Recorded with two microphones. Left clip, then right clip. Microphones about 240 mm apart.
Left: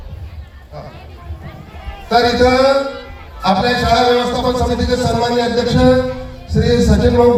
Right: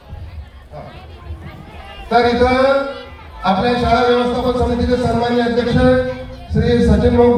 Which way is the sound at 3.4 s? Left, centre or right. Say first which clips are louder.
Left 1 dB; left.